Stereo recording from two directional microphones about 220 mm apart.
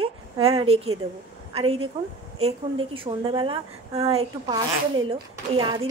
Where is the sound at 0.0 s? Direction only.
25° right (ahead or behind).